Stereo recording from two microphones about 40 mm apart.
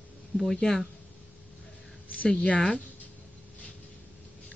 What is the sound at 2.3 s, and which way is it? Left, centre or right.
Speech, left.